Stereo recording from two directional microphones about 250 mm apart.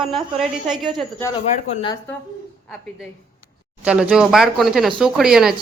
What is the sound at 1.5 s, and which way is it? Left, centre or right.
Speech, left.